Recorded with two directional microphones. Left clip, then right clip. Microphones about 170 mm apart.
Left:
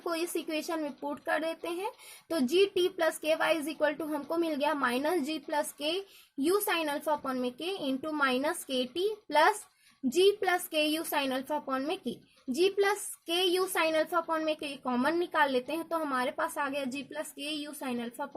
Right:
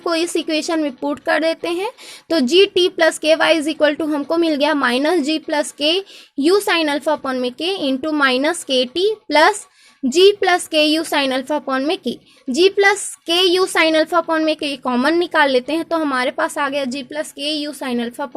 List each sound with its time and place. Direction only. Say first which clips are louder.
0.0 s a woman's voice: right 14 dB; 40° right (ahead or behind)